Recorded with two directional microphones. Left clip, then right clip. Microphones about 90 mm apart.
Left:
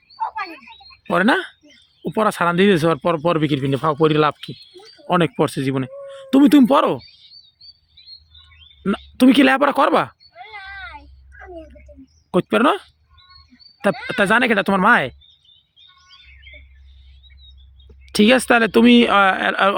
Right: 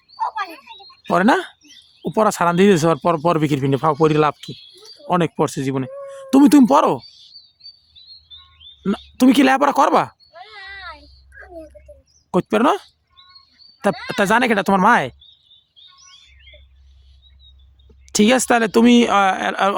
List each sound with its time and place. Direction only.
0.2 s a sound: 10° left (ahead or behind)
0.5 s a sound: 15° right (ahead or behind)
1.1 s speech: 35° right (ahead or behind)
3.9 s speech: 20° right (ahead or behind)
5.0 s speech: centre (ahead or behind)
6.3 s speech: 45° right (ahead or behind)
8.8 s speech: 5° right (ahead or behind)
9.4 s speech: 20° right (ahead or behind)
11.5 s a sound: 25° right (ahead or behind)
12.3 s speech: 20° right (ahead or behind)
18.0 s speech: 5° right (ahead or behind)